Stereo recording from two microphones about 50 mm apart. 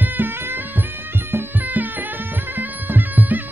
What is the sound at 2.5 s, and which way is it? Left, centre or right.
Music, right.